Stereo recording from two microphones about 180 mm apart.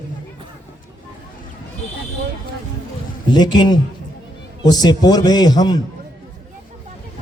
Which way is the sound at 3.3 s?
25° left (ahead or behind).